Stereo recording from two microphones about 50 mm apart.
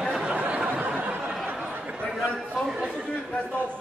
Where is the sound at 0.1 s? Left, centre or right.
Centre.